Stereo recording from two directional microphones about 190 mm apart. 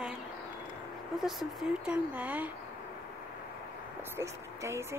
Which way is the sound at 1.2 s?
Centre (ahead or behind).